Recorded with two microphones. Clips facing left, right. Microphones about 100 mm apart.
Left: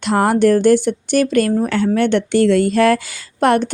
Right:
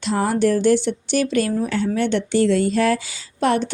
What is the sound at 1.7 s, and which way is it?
A woman's voice, 65° left (ahead or behind).